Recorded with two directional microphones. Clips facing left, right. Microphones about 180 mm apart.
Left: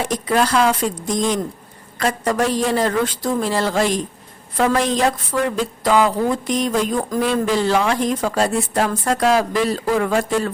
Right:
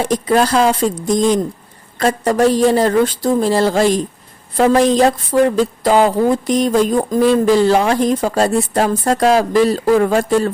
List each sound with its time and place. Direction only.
0.0 s speech: 30° right (ahead or behind)